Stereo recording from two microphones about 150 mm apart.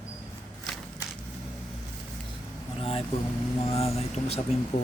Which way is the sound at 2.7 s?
35° left (ahead or behind).